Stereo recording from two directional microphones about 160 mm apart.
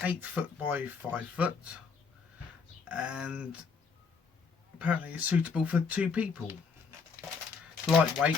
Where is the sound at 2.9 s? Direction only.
5° right (ahead or behind).